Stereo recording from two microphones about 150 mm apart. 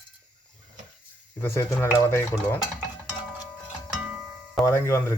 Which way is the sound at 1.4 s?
15° left (ahead or behind).